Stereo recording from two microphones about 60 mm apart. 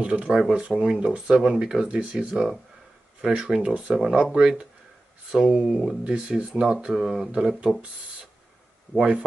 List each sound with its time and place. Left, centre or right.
0.0 s speech: right
0.3 s speech: centre
6.2 s speech: centre
6.7 s speech: centre
7.7 s speech: right
8.9 s speech: centre